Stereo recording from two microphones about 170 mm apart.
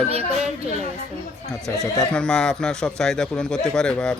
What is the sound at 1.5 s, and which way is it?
Speech, 20° left (ahead or behind).